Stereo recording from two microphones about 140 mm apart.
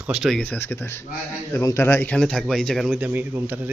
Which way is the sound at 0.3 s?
10° left (ahead or behind).